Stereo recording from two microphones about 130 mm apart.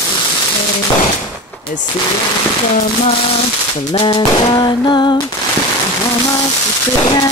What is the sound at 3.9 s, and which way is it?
Speech, 45° left (ahead or behind).